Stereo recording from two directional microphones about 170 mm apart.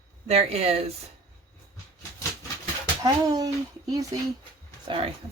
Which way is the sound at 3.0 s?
20° right (ahead or behind).